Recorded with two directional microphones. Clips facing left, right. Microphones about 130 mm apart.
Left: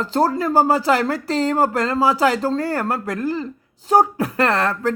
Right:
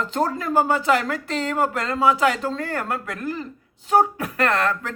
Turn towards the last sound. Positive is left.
turn(degrees=30)  # may be behind; listen again after turning